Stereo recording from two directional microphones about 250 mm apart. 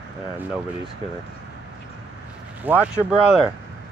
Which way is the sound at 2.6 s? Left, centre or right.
Centre.